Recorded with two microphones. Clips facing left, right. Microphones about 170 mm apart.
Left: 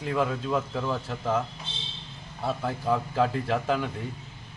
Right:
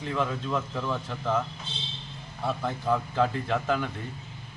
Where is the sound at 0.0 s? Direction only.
10° left (ahead or behind).